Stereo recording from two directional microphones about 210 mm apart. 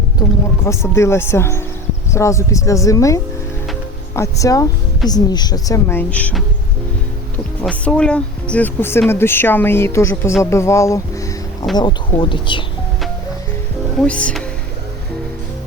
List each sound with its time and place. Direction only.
0.2 s speech: 15° left (ahead or behind)
7.6 s speech: 5° left (ahead or behind); by 12.6 s 25° left (ahead or behind)
14.0 s speech: 5° left (ahead or behind)